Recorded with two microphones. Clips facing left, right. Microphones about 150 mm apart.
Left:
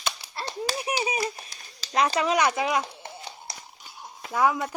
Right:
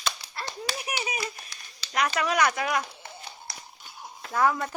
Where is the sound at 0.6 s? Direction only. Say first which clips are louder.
Left 6 dB; 35° left (ahead or behind).